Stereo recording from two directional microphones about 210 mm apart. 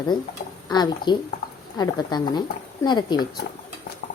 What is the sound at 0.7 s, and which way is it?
A woman's voice, 20° left (ahead or behind).